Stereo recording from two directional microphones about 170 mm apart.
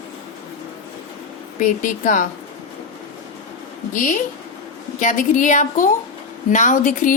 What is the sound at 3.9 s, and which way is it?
Speech, 50° left (ahead or behind).